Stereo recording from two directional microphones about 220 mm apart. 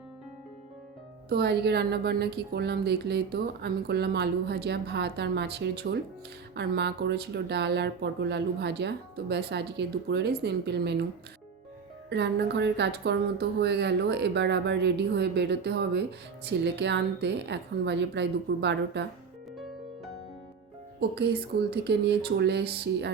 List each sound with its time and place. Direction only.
1.3 s a woman's voice: 50° right (ahead or behind)
12.0 s a woman's voice: 50° right (ahead or behind)
21.7 s a woman's voice: 50° right (ahead or behind)